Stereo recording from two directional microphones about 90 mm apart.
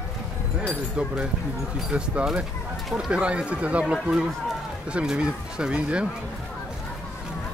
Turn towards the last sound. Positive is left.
turn(degrees=-10)  # may be behind; listen again after turning